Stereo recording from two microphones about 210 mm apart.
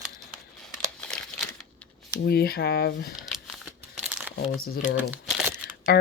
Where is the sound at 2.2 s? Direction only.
50° left (ahead or behind).